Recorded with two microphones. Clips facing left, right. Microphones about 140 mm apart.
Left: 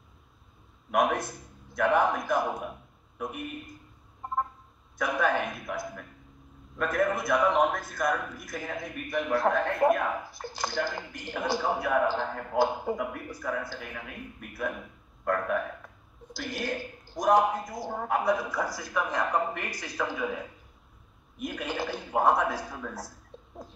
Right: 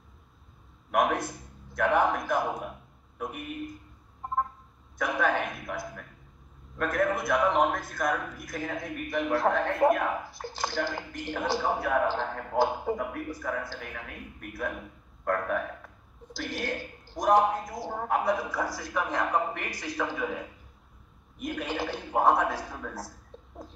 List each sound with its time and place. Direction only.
0.9 s a man's voice: 5° right (ahead or behind)
5.0 s a man's voice: centre (ahead or behind)
15.2 s a man's voice: centre (ahead or behind)
21.5 s a man's voice: centre (ahead or behind)